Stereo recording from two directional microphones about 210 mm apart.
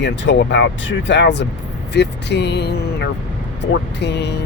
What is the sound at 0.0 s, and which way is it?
Speech, 55° left (ahead or behind).